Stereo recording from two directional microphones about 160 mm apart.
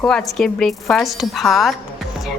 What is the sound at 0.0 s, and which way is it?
A woman's voice, 5° left (ahead or behind).